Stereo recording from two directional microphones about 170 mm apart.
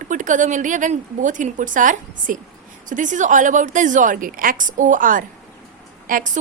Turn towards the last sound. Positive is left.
turn(degrees=-50)  # may be behind; listen again after turning